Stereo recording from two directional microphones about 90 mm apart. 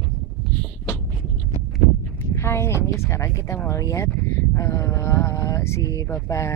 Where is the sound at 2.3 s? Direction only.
30° left (ahead or behind).